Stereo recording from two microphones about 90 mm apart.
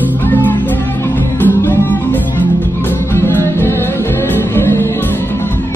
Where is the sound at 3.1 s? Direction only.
25° left (ahead or behind).